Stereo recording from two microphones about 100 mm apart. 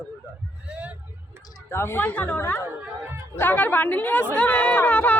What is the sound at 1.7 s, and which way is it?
A woman's voice, 25° left (ahead or behind).